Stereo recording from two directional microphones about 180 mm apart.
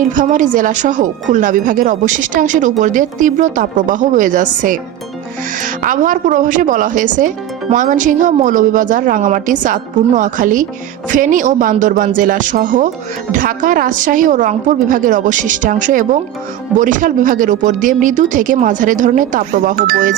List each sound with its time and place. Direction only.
0.1 s a woman's voice: 45° right (ahead or behind)